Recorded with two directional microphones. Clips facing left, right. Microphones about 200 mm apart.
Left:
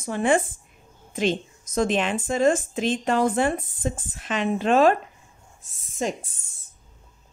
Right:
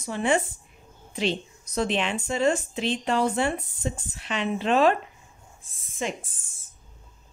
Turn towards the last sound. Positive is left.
turn(degrees=40)  # may be behind; listen again after turning